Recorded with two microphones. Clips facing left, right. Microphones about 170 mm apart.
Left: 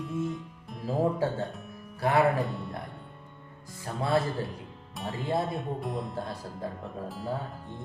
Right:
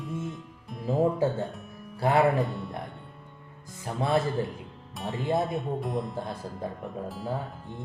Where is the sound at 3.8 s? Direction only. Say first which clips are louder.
Right 1 dB; 20° right (ahead or behind).